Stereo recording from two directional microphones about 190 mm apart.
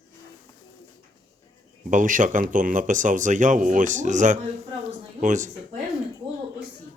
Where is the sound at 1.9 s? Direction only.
40° right (ahead or behind).